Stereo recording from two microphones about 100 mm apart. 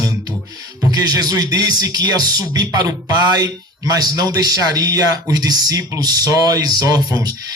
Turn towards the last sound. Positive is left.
turn(degrees=-40)  # may be behind; listen again after turning